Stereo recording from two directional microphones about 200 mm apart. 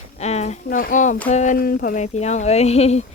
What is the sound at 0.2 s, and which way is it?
Speech, 35° left (ahead or behind).